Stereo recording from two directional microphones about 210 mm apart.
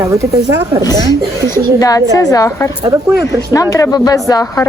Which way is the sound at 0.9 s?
15° left (ahead or behind).